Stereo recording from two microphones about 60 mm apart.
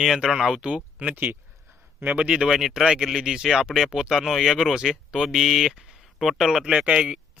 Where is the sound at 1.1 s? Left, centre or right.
Right.